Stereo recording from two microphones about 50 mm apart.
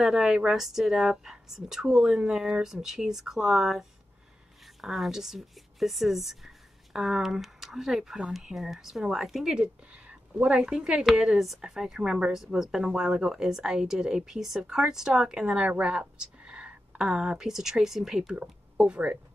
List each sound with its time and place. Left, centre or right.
0.0 s speech: centre
4.8 s speech: centre
10.0 s a sound: right
10.6 s speech: centre
11.3 s speech: centre